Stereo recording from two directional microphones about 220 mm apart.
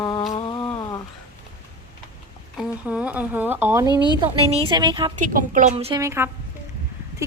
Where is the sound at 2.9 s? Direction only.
5° right (ahead or behind).